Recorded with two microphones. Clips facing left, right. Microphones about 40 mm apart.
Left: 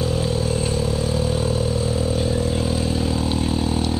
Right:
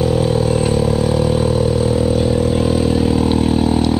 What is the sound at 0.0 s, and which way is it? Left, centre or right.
Vehicle, centre.